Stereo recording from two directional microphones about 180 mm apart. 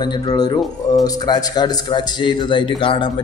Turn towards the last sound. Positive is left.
turn(degrees=30)  # may be behind; listen again after turning